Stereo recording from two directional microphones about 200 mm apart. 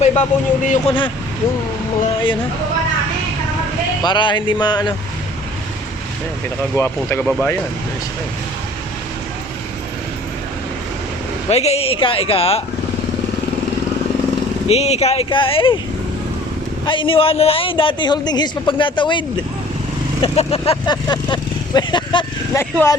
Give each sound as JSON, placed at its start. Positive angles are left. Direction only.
{"t": 0.0, "sound": "a man's voice", "side_deg": 35}
{"t": 4.0, "sound": "a man's voice", "side_deg": 25}
{"t": 6.7, "sound": "speech", "side_deg": 10}
{"t": 7.3, "sound": "speech", "side_deg": 0}
{"t": 11.4, "sound": "a man's voice", "side_deg": 30}
{"t": 14.7, "sound": "a man's voice", "side_deg": 30}
{"t": 16.8, "sound": "a man's voice", "side_deg": 25}
{"t": 20.2, "sound": "speech", "side_deg": 30}